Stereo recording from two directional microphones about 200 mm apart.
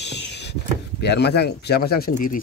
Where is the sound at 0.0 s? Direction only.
60° left (ahead or behind).